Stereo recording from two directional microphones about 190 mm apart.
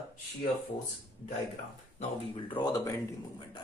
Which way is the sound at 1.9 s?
25° left (ahead or behind).